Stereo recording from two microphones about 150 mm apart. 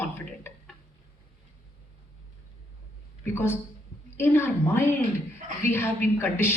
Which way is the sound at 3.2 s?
15° left (ahead or behind).